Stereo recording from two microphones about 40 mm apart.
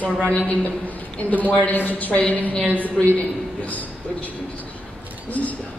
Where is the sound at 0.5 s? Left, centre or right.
Left.